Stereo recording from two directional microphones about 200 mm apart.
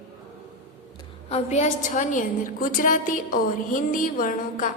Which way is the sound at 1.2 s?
30° left (ahead or behind).